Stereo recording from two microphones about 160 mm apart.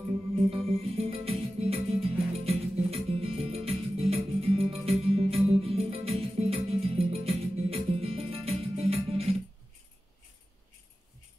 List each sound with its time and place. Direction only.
0.7 s music: 40° right (ahead or behind)
4.1 s guitar: 40° right (ahead or behind)
4.8 s music: 40° right (ahead or behind)